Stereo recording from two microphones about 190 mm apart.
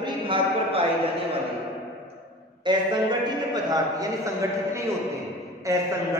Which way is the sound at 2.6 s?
25° right (ahead or behind).